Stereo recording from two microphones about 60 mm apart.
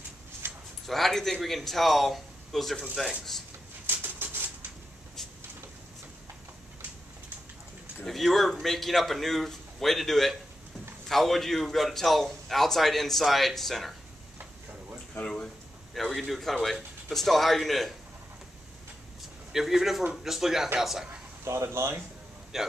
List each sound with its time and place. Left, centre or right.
0.4 s a sound: right
0.8 s a man's voice: centre
3.8 s a sound: right
8.0 s a man's voice: centre
15.1 s speech: centre
15.9 s a man's voice: centre
19.5 s a man's voice: centre
21.5 s speech: right
22.5 s a man's voice: centre